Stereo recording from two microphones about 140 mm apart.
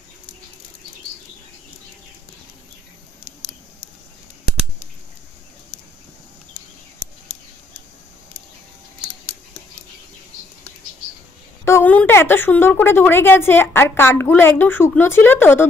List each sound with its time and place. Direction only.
11.6 s speech: 15° left (ahead or behind)